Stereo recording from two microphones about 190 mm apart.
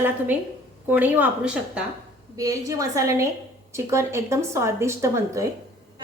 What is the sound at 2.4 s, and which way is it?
A woman's voice, 20° right (ahead or behind).